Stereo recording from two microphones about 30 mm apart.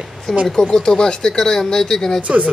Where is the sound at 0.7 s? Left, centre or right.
Left.